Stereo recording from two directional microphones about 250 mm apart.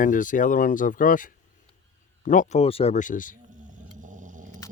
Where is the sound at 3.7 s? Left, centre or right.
Right.